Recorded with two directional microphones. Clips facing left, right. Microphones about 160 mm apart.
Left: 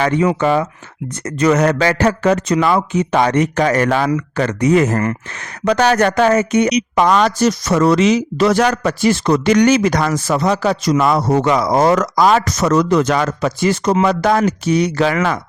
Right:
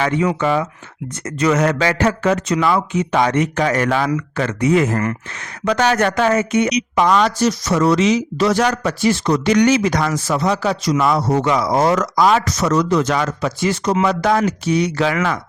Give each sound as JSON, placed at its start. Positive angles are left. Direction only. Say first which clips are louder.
{"t": 0.0, "sound": "speech", "louder": "left 3 dB", "side_deg": 40}